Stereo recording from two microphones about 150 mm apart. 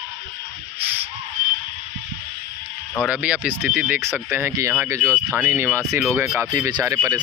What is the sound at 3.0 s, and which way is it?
Speech, 10° right (ahead or behind).